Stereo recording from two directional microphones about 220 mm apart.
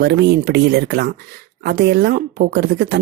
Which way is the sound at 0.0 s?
50° right (ahead or behind).